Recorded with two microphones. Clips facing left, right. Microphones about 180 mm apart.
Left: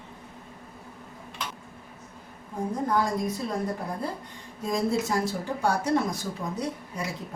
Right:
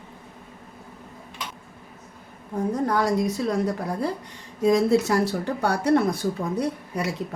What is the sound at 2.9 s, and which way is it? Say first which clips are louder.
Speech: right 2 dB; 80° right.